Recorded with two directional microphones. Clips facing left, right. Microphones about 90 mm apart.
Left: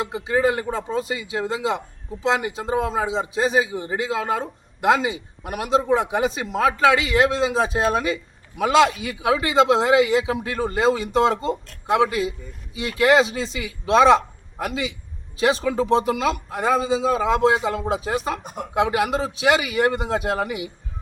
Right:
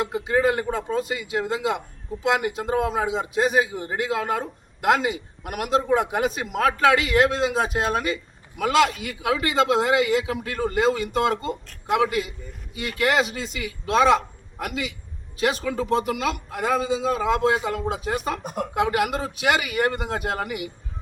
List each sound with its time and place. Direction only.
0.0 s a man's voice: 20° left (ahead or behind)
18.4 s speech: centre (ahead or behind)
18.7 s a man's voice: 25° left (ahead or behind)